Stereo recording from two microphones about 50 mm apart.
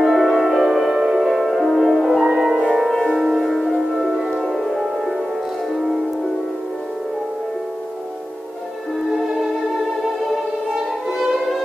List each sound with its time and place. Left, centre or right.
0.0 s music: centre
2.2 s music: centre
3.1 s music: centre
9.1 s music: centre
11.1 s music: centre